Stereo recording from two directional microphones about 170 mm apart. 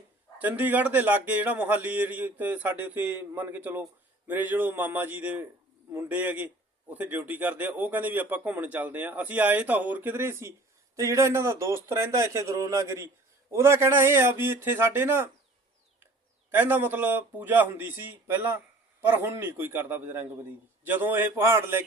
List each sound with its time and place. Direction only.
0.3 s speech: 10° right (ahead or behind)
16.5 s speech: 10° right (ahead or behind)